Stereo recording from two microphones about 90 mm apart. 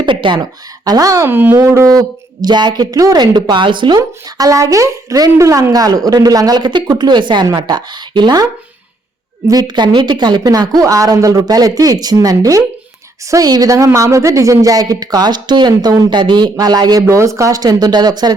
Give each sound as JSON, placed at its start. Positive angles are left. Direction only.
{"t": 0.0, "sound": "a sound", "side_deg": -65}
{"t": 0.9, "sound": "a woman's voice", "side_deg": -40}
{"t": 1.3, "sound": "speech", "side_deg": -25}
{"t": 9.5, "sound": "a woman's voice", "side_deg": -50}
{"t": 16.1, "sound": "speech", "side_deg": -60}
{"t": 17.2, "sound": "speech", "side_deg": -35}